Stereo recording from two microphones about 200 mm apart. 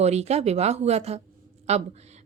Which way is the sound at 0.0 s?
35° right (ahead or behind).